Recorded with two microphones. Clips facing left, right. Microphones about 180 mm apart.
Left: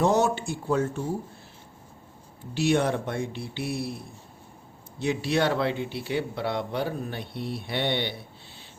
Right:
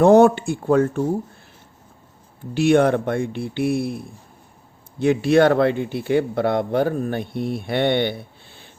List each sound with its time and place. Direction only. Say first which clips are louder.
0.0 s speech: right 10 dB; 55° right (ahead or behind)
2.6 s speech: right 8 dB; 55° right (ahead or behind)
4.9 s speech: right 10 dB; 55° right (ahead or behind)